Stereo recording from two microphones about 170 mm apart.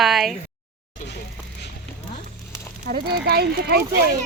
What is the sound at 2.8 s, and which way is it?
Speech, 65° right (ahead or behind).